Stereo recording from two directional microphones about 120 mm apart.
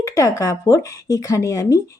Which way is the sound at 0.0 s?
25° left (ahead or behind).